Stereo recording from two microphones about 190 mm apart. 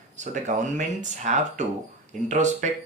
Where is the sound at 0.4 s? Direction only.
40° right (ahead or behind).